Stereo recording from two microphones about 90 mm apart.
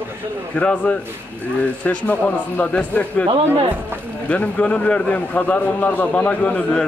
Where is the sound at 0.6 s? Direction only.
10° left (ahead or behind).